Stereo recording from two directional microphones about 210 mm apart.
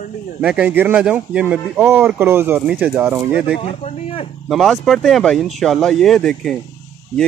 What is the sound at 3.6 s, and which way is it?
Speech, 30° left (ahead or behind).